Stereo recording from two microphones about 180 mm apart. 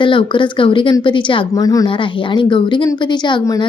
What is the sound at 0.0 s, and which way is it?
Speech, 25° left (ahead or behind).